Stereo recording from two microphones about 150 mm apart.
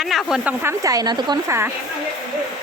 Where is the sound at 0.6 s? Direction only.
20° right (ahead or behind).